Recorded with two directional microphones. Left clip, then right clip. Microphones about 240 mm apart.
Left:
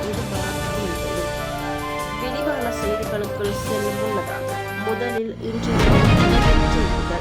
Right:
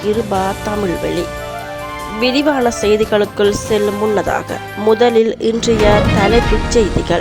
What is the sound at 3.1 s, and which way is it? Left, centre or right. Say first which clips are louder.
Speech: right 12 dB; right.